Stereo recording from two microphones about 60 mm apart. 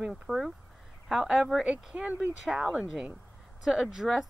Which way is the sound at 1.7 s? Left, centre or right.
Centre.